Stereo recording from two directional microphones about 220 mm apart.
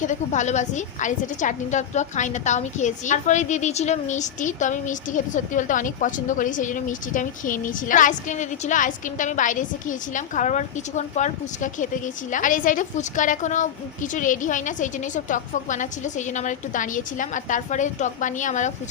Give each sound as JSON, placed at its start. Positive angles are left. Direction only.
{"t": 0.0, "sound": "a woman's voice", "side_deg": 35}